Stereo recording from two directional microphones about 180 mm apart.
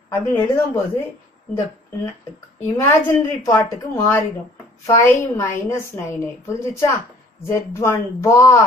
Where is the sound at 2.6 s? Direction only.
15° left (ahead or behind).